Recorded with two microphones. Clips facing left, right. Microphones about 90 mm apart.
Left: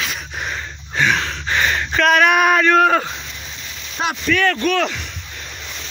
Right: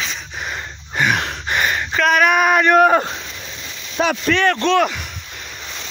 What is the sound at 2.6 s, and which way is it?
Speech, 20° right (ahead or behind).